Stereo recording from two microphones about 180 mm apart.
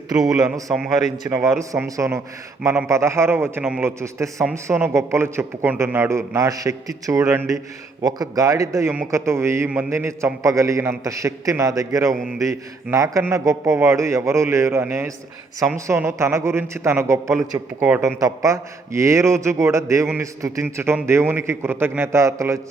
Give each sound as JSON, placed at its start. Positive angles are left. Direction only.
{"t": 0.3, "sound": "speech", "side_deg": -20}
{"t": 0.7, "sound": "a man's voice", "side_deg": 0}
{"t": 1.3, "sound": "a man's voice", "side_deg": -15}